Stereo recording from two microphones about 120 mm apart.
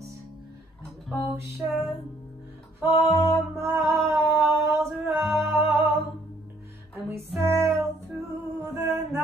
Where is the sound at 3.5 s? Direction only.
20° right (ahead or behind).